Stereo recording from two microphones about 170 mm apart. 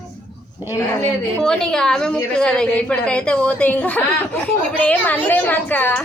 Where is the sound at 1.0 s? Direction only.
5° left (ahead or behind).